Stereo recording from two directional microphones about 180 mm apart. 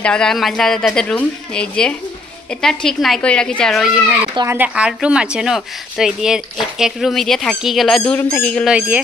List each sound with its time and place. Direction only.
0.0 s a woman's voice: 5° left (ahead or behind)
8.7 s speech: 10° right (ahead or behind)